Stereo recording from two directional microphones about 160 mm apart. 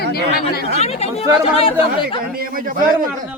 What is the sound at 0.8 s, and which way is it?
Speech, 40° left (ahead or behind).